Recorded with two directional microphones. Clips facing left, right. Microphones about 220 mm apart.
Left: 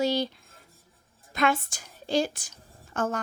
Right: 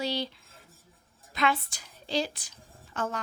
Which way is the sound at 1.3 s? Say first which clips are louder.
Left 3 dB; 45° left (ahead or behind).